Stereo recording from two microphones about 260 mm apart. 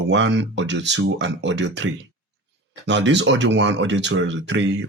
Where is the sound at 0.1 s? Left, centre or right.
Right.